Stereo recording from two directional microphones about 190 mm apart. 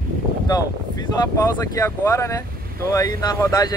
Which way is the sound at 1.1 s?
20° left (ahead or behind).